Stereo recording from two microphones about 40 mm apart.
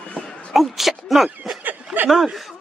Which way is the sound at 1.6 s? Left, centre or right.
Right.